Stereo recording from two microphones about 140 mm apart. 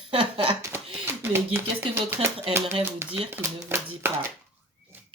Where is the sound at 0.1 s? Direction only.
40° right (ahead or behind).